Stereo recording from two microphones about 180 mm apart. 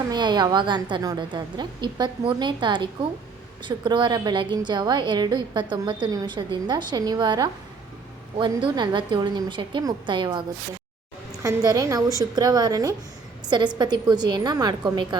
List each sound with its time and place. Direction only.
0.1 s a woman's voice: 25° right (ahead or behind)
11.4 s a woman's voice: 20° right (ahead or behind)